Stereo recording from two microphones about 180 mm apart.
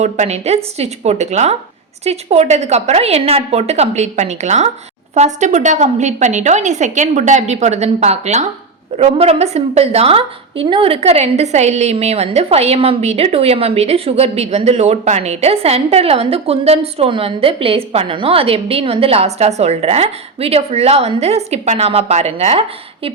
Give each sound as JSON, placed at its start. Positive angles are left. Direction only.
{"t": 0.0, "sound": "a woman's voice", "side_deg": -40}